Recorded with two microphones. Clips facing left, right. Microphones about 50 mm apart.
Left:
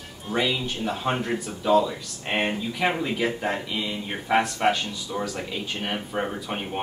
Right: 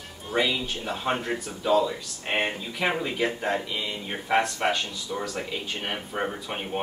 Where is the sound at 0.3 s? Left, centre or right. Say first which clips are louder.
Even; centre.